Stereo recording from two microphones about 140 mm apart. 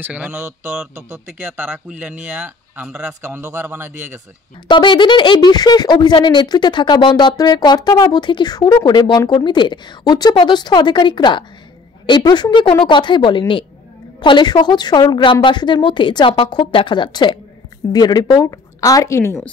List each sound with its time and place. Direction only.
0.0 s speech: 10° right (ahead or behind)
4.6 s speech: 35° left (ahead or behind)